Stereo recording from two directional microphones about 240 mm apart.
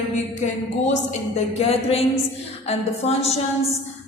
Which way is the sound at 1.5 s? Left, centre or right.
Left.